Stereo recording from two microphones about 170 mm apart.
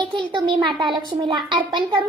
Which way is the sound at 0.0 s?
30° right (ahead or behind).